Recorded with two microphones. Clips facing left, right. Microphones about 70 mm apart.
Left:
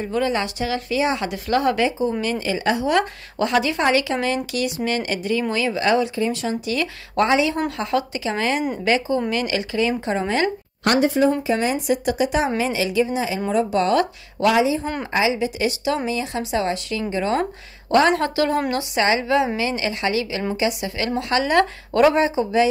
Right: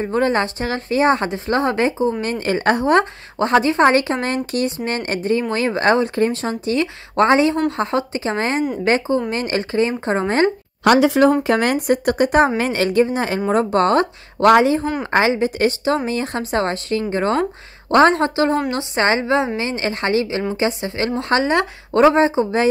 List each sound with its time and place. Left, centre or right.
0.0 s a woman's voice: right
11.0 s speech: right
11.4 s a woman's voice: right